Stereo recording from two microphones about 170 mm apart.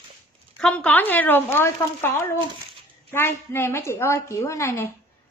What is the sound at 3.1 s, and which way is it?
A woman's voice, 15° left (ahead or behind).